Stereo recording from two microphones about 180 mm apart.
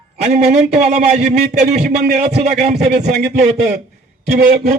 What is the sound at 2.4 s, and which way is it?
A man's voice, 35° right (ahead or behind).